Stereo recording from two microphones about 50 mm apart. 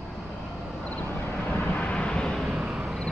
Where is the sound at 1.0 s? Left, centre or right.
Left.